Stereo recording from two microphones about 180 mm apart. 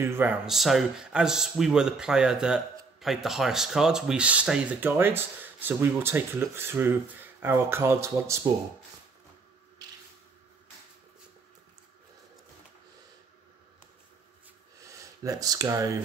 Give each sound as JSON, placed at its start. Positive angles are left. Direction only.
{"t": 0.0, "sound": "speech", "side_deg": -10}
{"t": 14.8, "sound": "speech", "side_deg": -20}